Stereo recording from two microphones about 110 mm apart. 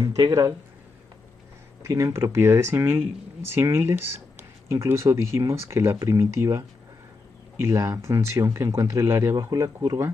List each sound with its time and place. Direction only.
0.0 s speech: 30° right (ahead or behind)
1.8 s speech: 30° right (ahead or behind)